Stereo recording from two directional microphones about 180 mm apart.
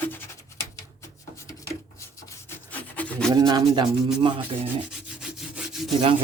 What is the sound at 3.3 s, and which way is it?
Speech, 25° right (ahead or behind).